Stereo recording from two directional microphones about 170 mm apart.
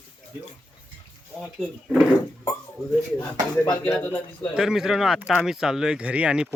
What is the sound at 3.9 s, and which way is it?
Speech, 15° left (ahead or behind).